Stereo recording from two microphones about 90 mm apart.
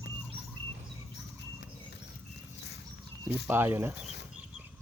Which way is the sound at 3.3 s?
25° right (ahead or behind).